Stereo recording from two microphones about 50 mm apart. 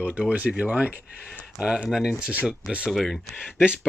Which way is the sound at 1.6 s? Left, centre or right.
Centre.